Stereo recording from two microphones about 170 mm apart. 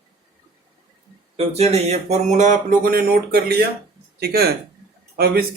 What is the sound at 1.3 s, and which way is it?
Speech, 35° right (ahead or behind).